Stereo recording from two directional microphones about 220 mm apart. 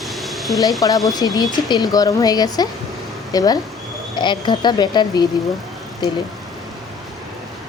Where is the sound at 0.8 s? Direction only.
15° left (ahead or behind).